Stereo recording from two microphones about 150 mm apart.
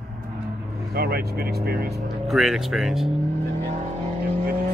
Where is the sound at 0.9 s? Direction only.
90° right.